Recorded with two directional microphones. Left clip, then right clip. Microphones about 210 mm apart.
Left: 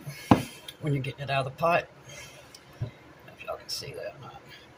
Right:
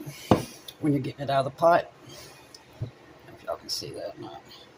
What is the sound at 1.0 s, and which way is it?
Speech, 50° right (ahead or behind).